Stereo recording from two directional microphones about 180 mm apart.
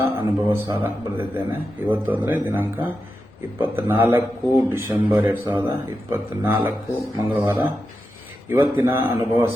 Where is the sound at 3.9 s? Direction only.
10° right (ahead or behind).